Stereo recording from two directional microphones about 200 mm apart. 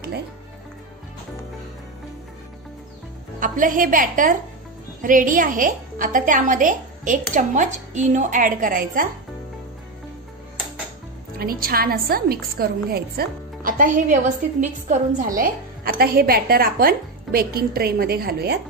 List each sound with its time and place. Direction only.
3.3 s a woman's voice: 40° right (ahead or behind)
11.3 s a woman's voice: 45° right (ahead or behind)